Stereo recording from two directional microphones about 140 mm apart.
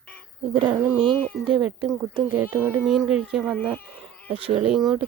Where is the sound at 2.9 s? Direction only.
5° right (ahead or behind).